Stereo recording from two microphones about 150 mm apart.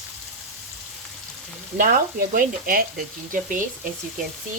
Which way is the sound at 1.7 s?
65° right (ahead or behind).